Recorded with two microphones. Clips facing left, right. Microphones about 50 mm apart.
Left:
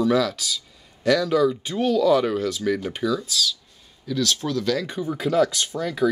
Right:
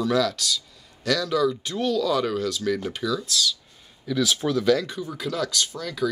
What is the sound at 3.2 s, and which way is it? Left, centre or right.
Speech, centre.